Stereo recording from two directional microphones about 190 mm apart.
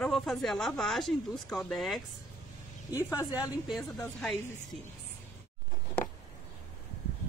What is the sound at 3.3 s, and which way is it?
Speech, 5° right (ahead or behind).